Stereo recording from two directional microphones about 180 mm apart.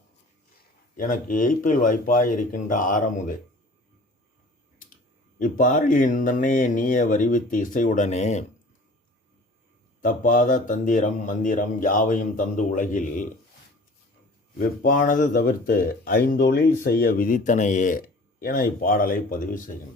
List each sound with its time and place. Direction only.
0.9 s speech: 50° left (ahead or behind)
5.4 s speech: 50° left (ahead or behind)
10.0 s speech: 50° left (ahead or behind)
14.8 s speech: 50° left (ahead or behind)